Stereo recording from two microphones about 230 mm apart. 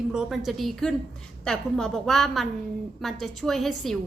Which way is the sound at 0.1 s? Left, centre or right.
Centre.